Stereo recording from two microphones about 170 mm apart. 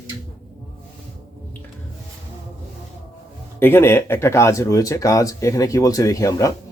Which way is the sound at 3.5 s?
15° left (ahead or behind).